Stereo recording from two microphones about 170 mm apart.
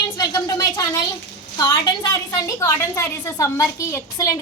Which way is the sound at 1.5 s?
20° left (ahead or behind).